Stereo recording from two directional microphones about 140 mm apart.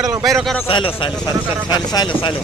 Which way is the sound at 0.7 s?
40° left (ahead or behind).